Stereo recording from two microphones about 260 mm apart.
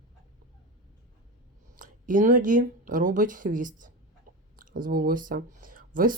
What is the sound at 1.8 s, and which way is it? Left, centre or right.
Speech, right.